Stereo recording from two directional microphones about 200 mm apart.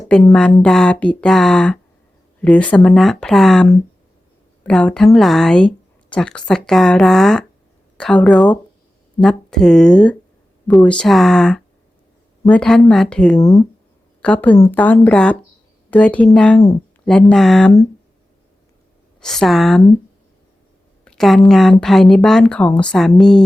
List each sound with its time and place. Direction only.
0.1 s speech: 5° left (ahead or behind)
13.4 s speech: 15° left (ahead or behind)
19.2 s speech: centre (ahead or behind)
21.0 s speech: 5° left (ahead or behind)